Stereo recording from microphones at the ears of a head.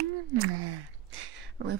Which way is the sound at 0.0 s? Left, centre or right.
Right.